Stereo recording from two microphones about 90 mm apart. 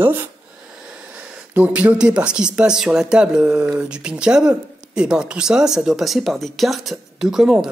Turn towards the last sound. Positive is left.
turn(degrees=-5)  # may be behind; listen again after turning